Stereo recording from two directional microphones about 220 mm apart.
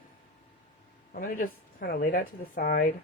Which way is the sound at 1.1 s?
40° left (ahead or behind).